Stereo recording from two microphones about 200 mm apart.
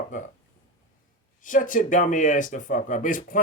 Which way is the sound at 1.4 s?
40° left (ahead or behind).